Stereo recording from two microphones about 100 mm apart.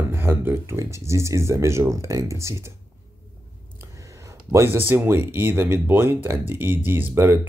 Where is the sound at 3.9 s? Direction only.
30° right (ahead or behind).